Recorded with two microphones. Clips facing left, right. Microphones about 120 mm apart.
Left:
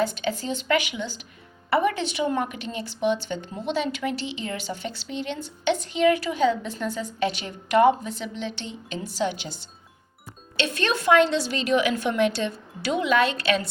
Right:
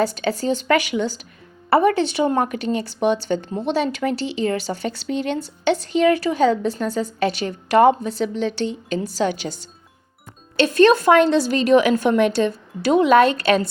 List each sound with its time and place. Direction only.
0.0 s a woman's voice: 40° right (ahead or behind)
10.6 s a woman's voice: 45° right (ahead or behind)